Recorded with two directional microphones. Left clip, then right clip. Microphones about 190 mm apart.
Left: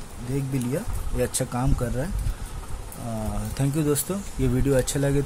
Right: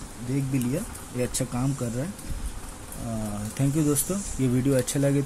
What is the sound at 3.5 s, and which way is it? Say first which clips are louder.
Speech: left 1 dB; 20° left (ahead or behind).